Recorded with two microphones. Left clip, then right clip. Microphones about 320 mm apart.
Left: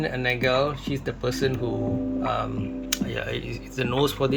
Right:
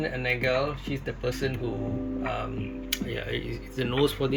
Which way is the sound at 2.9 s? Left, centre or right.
Centre.